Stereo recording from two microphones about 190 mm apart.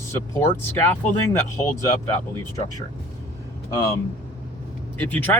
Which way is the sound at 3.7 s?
15° left (ahead or behind).